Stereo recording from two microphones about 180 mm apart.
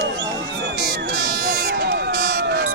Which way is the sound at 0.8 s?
65° right (ahead or behind).